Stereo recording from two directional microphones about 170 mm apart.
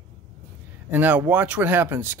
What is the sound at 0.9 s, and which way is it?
Speech, 10° right (ahead or behind).